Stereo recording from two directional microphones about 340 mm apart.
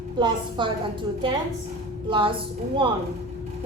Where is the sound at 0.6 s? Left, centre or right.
Centre.